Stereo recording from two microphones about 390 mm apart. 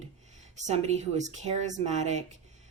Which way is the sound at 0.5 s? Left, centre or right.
Centre.